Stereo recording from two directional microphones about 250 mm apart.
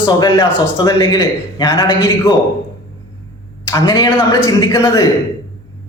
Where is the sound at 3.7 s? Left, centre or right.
Centre.